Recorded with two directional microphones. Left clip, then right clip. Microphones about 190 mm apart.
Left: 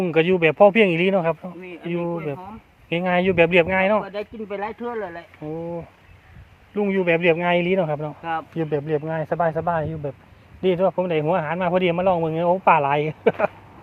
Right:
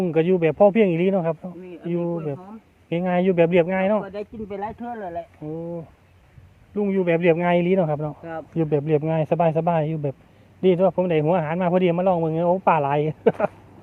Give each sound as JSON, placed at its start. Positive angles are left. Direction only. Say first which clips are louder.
{"t": 0.0, "sound": "speech", "louder": "left 2 dB", "side_deg": -10}
{"t": 4.1, "sound": "speech", "louder": "left 2 dB", "side_deg": -30}
{"t": 4.6, "sound": "speech", "louder": "left 3 dB", "side_deg": -40}
{"t": 5.5, "sound": "speech", "louder": "left 6 dB", "side_deg": 0}
{"t": 6.7, "sound": "speech", "louder": "left 1 dB", "side_deg": -10}
{"t": 8.2, "sound": "speech", "louder": "left 6 dB", "side_deg": 15}
{"t": 8.5, "sound": "a man's voice", "louder": "right 6 dB", "side_deg": -25}
{"t": 10.6, "sound": "speech", "louder": "right 1 dB", "side_deg": -25}